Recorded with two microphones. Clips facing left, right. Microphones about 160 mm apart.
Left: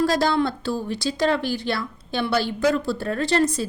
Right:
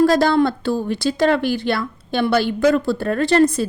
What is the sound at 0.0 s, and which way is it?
A woman's voice, 55° right (ahead or behind).